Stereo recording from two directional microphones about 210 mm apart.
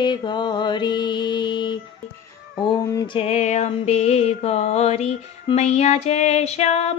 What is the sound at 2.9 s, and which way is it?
Music, 25° left (ahead or behind).